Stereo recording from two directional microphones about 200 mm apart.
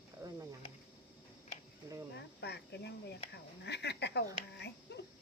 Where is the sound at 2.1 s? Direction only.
55° left (ahead or behind).